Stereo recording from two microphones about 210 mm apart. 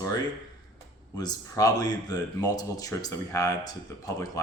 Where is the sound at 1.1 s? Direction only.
15° left (ahead or behind).